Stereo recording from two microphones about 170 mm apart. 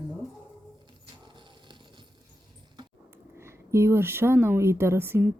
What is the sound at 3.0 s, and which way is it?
Speech, 15° right (ahead or behind).